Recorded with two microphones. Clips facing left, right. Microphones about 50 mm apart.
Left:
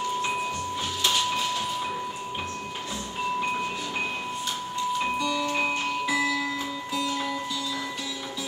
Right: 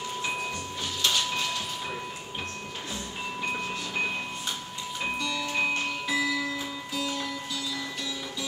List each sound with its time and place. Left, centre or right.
5.4 s music: centre